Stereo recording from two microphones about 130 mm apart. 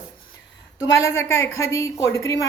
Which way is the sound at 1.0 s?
20° left (ahead or behind).